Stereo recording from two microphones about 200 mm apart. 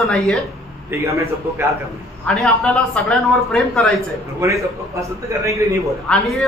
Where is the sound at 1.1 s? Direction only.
15° right (ahead or behind).